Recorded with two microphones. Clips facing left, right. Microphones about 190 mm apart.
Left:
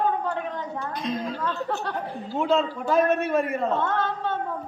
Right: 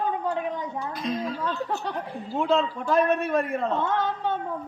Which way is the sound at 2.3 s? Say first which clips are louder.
Even; centre (ahead or behind).